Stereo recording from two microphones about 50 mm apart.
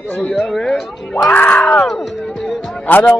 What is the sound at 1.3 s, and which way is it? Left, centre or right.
Speech, left.